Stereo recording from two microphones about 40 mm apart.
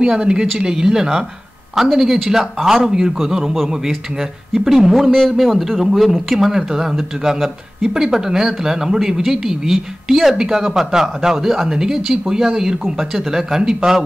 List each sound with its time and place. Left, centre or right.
0.0 s speech: right
4.6 s a man's voice: centre